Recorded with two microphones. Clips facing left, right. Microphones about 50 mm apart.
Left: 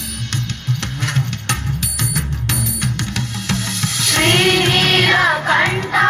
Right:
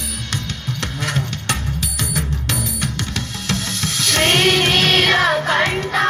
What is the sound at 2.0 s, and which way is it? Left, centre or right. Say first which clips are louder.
Music: even; centre.